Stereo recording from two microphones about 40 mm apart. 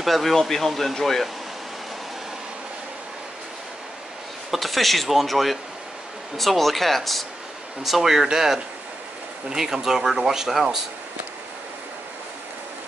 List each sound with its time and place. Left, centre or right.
0.0 s speech: centre
4.5 s speech: centre